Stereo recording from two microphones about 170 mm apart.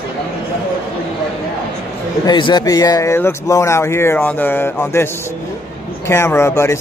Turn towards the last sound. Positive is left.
turn(degrees=15)  # may be behind; listen again after turning